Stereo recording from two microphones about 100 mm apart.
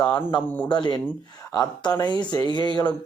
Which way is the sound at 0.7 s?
50° left (ahead or behind).